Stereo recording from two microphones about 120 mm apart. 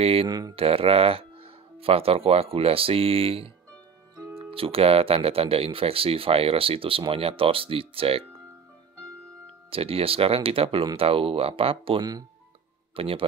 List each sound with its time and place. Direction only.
0.0 s speech: 55° right (ahead or behind)
0.3 s speech: 35° right (ahead or behind)
0.6 s speech: 55° right (ahead or behind)
9.7 s speech: 50° right (ahead or behind)